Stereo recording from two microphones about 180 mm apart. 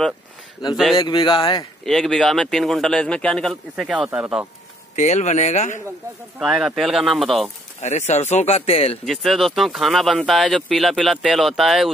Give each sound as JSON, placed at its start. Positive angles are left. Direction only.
{"t": 0.9, "sound": "speech", "side_deg": 25}
{"t": 1.9, "sound": "speech", "side_deg": 0}
{"t": 4.9, "sound": "speech", "side_deg": 40}
{"t": 6.4, "sound": "speech", "side_deg": -5}
{"t": 7.8, "sound": "speech", "side_deg": 40}
{"t": 9.0, "sound": "speech", "side_deg": 0}